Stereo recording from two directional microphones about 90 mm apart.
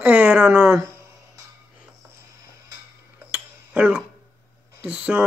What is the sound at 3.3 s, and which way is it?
Tick-tock, 15° right (ahead or behind).